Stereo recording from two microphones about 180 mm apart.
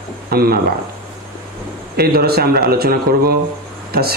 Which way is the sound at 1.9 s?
60° right (ahead or behind).